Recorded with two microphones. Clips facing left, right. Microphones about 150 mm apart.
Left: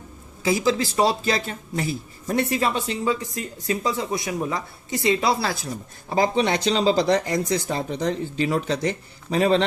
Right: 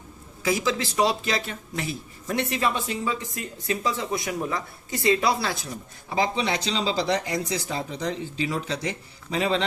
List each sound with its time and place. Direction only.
0.4 s a woman's voice: 30° left (ahead or behind)
5.4 s speech: 35° left (ahead or behind)